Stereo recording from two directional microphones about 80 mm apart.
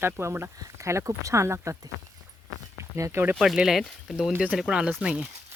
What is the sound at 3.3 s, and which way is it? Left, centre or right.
Speech, centre.